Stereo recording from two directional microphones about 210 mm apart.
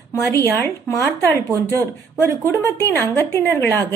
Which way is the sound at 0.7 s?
10° left (ahead or behind).